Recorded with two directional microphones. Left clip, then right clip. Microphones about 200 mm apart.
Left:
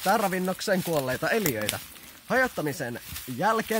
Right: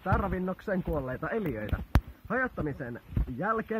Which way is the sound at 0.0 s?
45° left (ahead or behind).